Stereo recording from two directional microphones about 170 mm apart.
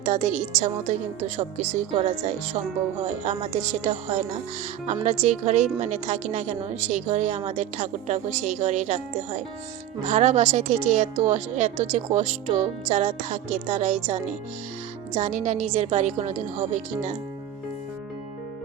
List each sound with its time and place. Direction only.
0.0 s a woman's voice: 45° right (ahead or behind)
5.2 s a woman's voice: 45° right (ahead or behind)
15.2 s a woman's voice: 45° right (ahead or behind)